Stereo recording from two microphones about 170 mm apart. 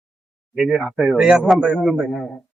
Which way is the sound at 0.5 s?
Centre (ahead or behind).